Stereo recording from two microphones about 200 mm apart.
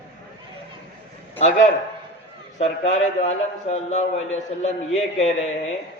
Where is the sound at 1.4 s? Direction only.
35° left (ahead or behind).